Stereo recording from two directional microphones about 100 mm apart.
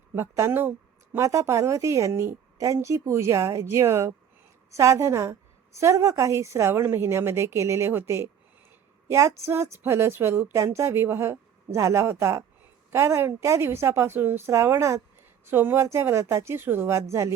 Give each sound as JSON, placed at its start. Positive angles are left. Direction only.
{"t": 0.2, "sound": "a woman's voice", "side_deg": -25}